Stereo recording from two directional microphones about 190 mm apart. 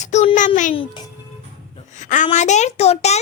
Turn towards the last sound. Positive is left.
turn(degrees=35)  # may be behind; listen again after turning